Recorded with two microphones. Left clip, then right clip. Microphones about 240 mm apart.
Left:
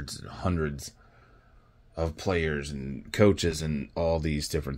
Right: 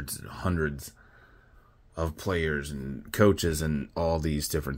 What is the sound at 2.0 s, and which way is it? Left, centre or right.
Speech, centre.